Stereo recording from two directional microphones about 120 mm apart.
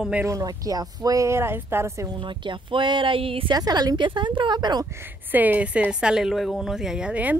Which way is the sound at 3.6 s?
30° right (ahead or behind).